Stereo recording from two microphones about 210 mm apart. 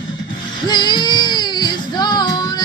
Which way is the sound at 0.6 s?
20° left (ahead or behind).